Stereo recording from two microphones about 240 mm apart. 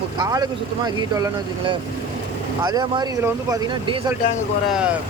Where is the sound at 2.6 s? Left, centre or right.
Centre.